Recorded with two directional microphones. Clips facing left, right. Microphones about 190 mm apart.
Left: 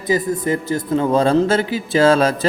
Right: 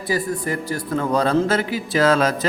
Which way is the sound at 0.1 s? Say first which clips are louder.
Left 5 dB; 20° left (ahead or behind).